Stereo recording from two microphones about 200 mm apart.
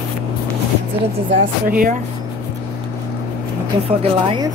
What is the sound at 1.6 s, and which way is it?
Speech, 45° right (ahead or behind).